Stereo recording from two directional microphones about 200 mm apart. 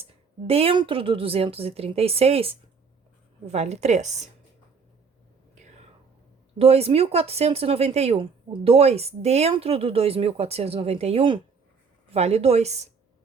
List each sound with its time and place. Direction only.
0.0 s speech: 30° right (ahead or behind)
6.6 s speech: 30° right (ahead or behind)